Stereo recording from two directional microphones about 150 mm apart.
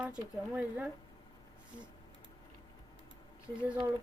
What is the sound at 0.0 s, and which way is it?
Speech, 5° right (ahead or behind).